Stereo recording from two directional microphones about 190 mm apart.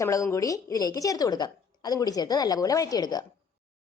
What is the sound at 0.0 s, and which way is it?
Speech, 15° left (ahead or behind).